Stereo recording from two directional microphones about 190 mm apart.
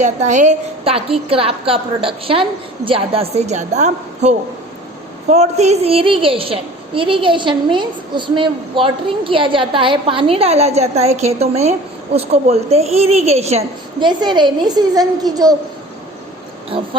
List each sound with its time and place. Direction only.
0.0 s a woman's voice: 40° right (ahead or behind); by 15.5 s 20° right (ahead or behind)
16.6 s a child's voice: 30° right (ahead or behind)